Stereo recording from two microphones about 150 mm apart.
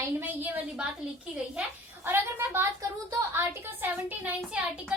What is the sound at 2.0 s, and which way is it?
A woman's voice, 15° right (ahead or behind).